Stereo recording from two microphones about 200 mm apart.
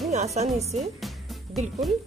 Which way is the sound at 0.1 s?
35° right (ahead or behind).